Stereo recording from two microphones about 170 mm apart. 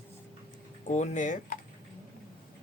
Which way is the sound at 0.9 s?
45° left (ahead or behind).